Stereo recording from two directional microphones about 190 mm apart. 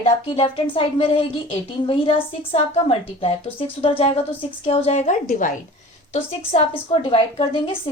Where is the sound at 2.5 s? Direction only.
30° left (ahead or behind).